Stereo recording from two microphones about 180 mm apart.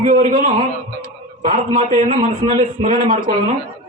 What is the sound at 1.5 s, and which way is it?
A man's voice, 50° right (ahead or behind).